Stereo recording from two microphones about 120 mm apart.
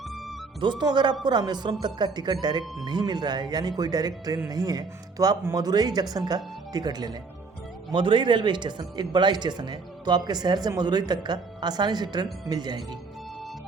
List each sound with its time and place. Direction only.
0.6 s a man's voice: 40° right (ahead or behind)